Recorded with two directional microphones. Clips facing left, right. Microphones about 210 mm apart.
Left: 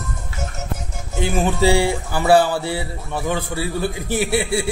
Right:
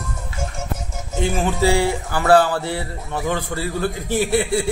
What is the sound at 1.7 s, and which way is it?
A man's voice, 10° left (ahead or behind).